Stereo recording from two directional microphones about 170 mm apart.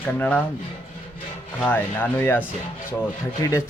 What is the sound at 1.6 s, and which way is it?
Speech, 10° left (ahead or behind).